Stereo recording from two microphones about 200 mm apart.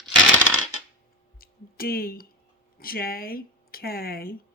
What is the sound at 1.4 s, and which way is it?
Speech, 50° left (ahead or behind).